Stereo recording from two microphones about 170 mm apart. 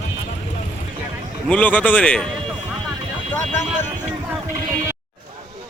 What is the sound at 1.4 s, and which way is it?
Speech, 10° left (ahead or behind).